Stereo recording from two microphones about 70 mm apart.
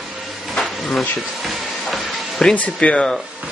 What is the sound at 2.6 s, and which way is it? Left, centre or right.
Speech, centre.